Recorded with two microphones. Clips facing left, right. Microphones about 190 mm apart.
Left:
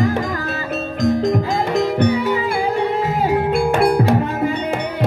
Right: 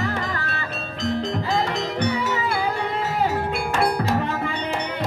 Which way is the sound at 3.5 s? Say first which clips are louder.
Left 7 dB; 55° left (ahead or behind).